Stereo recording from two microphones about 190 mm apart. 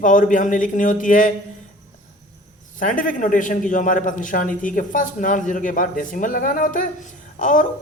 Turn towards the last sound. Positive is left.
turn(degrees=40)  # may be behind; listen again after turning